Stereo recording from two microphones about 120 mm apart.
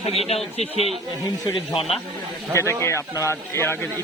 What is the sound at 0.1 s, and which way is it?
Speech, 60° left (ahead or behind).